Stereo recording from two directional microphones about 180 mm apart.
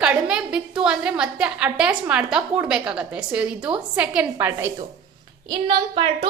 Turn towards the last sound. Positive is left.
turn(degrees=-25)  # may be behind; listen again after turning